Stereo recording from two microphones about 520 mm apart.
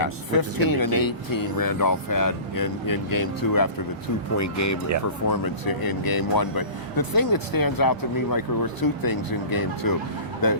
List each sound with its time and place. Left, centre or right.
0.0 s speech: left